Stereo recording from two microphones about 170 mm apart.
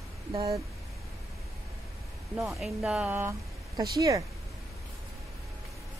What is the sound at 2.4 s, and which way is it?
Speech, centre (ahead or behind).